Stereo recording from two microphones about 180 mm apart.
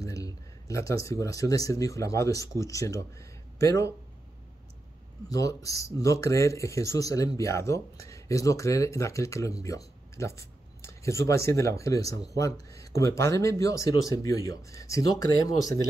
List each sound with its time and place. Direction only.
0.0 s speech: 20° left (ahead or behind)
5.3 s speech: 20° left (ahead or behind)